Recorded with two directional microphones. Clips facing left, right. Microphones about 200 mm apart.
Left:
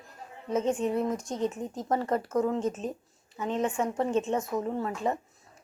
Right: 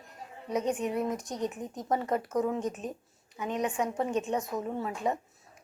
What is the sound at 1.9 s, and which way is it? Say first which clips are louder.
Speech: left 1 dB; centre (ahead or behind).